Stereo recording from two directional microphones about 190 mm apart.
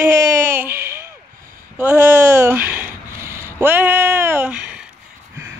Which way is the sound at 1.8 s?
10° right (ahead or behind).